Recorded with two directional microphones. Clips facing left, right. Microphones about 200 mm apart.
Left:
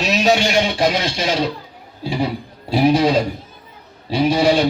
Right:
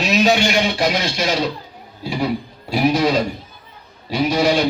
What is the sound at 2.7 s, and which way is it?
A man's voice, 30° left (ahead or behind).